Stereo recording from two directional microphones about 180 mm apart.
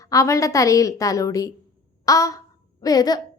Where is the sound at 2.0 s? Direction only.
20° left (ahead or behind).